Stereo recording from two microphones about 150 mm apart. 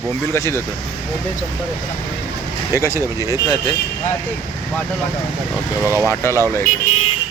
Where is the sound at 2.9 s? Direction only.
20° right (ahead or behind).